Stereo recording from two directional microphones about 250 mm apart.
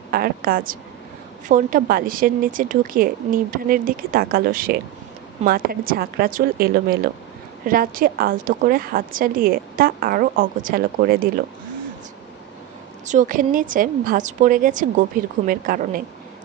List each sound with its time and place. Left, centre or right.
0.1 s a woman's voice: right
13.0 s a woman's voice: right